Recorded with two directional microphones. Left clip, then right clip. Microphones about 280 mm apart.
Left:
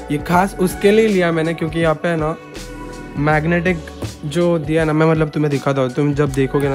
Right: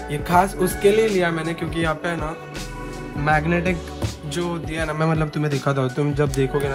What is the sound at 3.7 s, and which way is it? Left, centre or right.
Music, centre.